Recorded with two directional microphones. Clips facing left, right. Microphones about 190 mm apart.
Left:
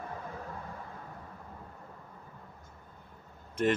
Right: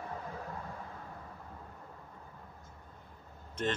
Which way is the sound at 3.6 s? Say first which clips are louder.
Left 6 dB; 10° left (ahead or behind).